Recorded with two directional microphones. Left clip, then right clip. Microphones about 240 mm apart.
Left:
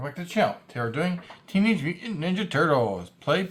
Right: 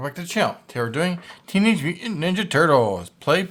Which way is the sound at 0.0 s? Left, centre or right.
Right.